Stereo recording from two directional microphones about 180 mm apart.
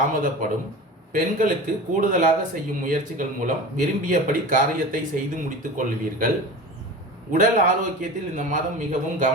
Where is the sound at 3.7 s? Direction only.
45° right (ahead or behind).